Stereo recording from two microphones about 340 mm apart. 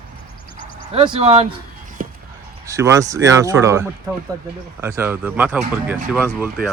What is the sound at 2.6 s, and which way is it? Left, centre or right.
A man's voice, centre.